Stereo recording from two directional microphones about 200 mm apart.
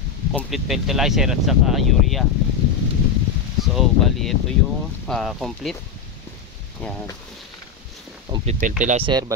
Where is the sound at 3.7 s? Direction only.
Centre (ahead or behind).